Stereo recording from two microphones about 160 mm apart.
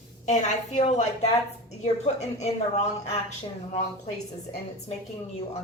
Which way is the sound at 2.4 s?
45° left (ahead or behind).